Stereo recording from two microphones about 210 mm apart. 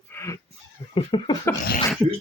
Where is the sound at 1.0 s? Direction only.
25° left (ahead or behind).